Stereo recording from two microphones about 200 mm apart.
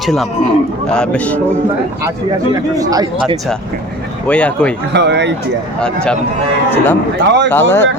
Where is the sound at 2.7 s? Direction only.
20° right (ahead or behind).